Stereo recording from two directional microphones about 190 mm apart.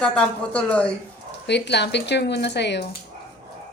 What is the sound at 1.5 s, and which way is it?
Speech, 65° left (ahead or behind).